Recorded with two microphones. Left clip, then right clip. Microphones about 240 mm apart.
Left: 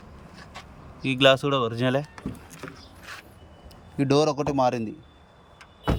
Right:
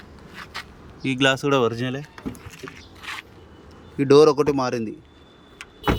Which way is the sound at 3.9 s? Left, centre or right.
Centre.